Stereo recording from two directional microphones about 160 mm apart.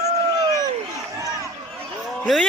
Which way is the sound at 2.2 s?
Centre (ahead or behind).